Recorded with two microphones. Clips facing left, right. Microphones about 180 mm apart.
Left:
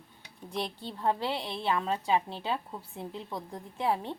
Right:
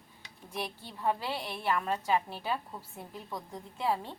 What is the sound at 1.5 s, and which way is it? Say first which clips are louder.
A woman's voice: right 1 dB; 25° left (ahead or behind).